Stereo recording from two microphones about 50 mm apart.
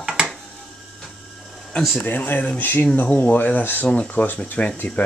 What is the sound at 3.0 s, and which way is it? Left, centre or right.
Speech, left.